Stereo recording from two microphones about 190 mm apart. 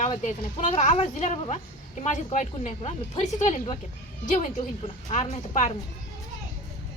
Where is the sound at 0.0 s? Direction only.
40° left (ahead or behind).